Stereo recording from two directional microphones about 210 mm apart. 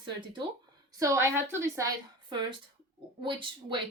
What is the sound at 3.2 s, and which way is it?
Speech, 25° right (ahead or behind).